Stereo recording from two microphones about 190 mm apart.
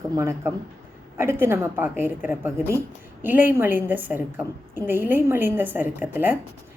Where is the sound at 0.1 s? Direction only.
15° right (ahead or behind).